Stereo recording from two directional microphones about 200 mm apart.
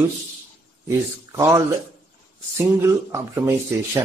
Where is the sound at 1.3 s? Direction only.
15° right (ahead or behind).